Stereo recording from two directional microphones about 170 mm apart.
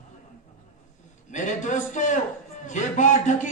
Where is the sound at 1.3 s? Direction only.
45° left (ahead or behind).